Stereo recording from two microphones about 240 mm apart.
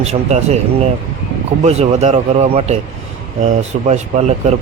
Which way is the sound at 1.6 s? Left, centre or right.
Right.